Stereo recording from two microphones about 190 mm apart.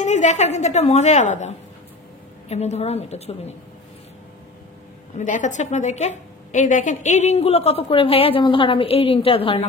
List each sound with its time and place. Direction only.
0.0 s a woman's voice: 40° left (ahead or behind)
2.5 s a woman's voice: 35° left (ahead or behind)
5.1 s a woman's voice: 40° left (ahead or behind)